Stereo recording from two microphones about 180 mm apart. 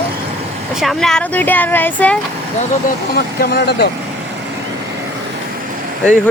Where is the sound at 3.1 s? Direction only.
60° left (ahead or behind).